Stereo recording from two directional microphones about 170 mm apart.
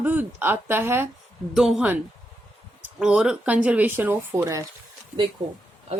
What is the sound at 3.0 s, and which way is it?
Speech, 5° right (ahead or behind).